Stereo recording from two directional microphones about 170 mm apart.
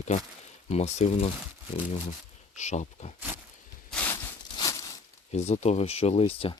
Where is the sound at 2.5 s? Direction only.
45° left (ahead or behind).